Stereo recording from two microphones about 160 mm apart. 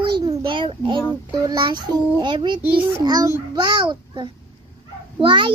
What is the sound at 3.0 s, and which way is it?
A child's voice, 25° right (ahead or behind).